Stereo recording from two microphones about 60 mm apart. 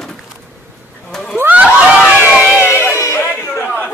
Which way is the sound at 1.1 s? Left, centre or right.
Centre.